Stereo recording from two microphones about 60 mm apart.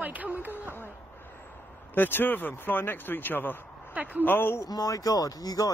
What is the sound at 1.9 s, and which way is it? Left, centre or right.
Speech, left.